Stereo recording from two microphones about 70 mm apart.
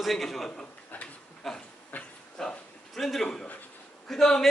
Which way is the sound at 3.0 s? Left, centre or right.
Centre.